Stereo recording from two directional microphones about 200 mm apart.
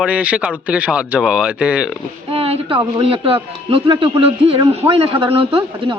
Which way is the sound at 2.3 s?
30° right (ahead or behind).